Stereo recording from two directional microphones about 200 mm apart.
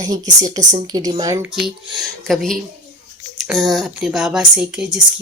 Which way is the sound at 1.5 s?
Centre (ahead or behind).